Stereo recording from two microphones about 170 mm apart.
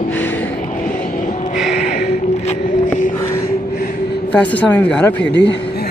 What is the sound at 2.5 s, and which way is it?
Boat, 50° left (ahead or behind).